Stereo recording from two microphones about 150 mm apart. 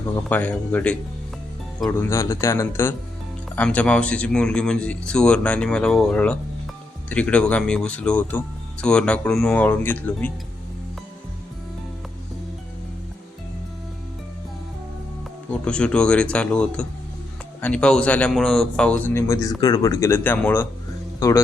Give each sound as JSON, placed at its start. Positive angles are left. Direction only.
{"t": 0.3, "sound": "speech", "side_deg": 10}
{"t": 15.6, "sound": "speech", "side_deg": 5}